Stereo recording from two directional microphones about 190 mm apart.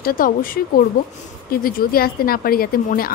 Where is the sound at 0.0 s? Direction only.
50° left (ahead or behind).